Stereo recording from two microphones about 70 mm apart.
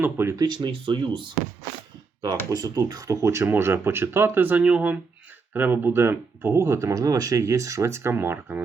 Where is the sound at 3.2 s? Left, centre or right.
Right.